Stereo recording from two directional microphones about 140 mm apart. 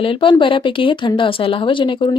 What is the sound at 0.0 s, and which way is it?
A woman's voice, 40° left (ahead or behind).